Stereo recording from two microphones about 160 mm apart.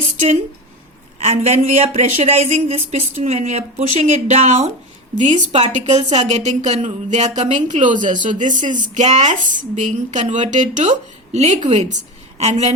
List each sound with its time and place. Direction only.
1.2 s a woman's voice: 45° right (ahead or behind)